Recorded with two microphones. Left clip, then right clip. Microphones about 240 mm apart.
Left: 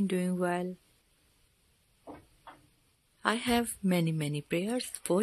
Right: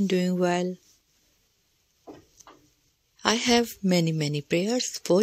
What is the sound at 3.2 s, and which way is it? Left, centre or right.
A woman's voice, centre.